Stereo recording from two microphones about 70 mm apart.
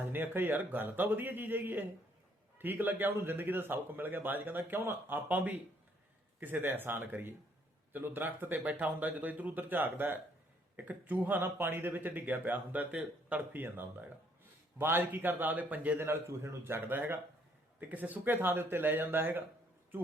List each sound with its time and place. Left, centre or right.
0.0 s speech: right
16.0 s a man's voice: right